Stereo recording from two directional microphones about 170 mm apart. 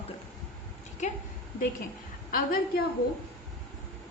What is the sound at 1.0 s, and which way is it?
Speech, 45° left (ahead or behind).